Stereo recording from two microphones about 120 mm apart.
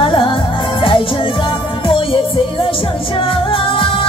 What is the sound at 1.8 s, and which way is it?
Music, 45° left (ahead or behind).